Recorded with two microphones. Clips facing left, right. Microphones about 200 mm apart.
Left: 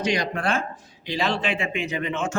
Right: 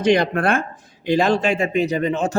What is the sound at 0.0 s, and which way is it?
Speech, 55° right (ahead or behind).